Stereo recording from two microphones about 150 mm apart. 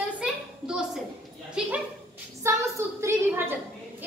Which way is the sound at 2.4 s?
15° right (ahead or behind).